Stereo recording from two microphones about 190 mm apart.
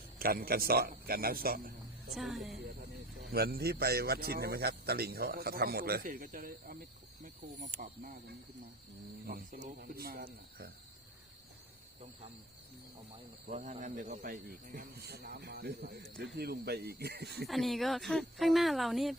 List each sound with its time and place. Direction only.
0.2 s a man's voice: 50° right (ahead or behind)
2.1 s speech: centre (ahead or behind)
3.3 s a man's voice: 55° right (ahead or behind)
9.2 s speech: 45° right (ahead or behind)
13.5 s a man's voice: 40° right (ahead or behind); by 17.4 s 60° right (ahead or behind)
17.4 s speech: centre (ahead or behind)